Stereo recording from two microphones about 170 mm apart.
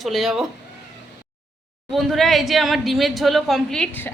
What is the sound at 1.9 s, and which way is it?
A woman's voice, centre (ahead or behind).